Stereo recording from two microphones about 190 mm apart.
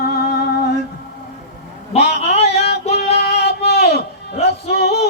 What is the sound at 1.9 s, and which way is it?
Music, 35° left (ahead or behind).